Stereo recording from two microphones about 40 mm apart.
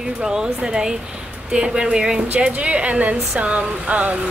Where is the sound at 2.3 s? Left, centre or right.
Right.